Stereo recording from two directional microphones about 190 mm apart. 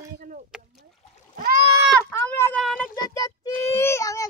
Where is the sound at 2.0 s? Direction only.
10° left (ahead or behind).